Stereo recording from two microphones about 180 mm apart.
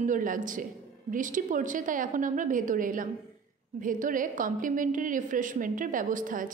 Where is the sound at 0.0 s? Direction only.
45° right (ahead or behind).